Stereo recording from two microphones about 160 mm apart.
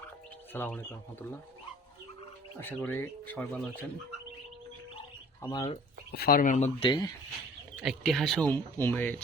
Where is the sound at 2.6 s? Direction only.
10° left (ahead or behind).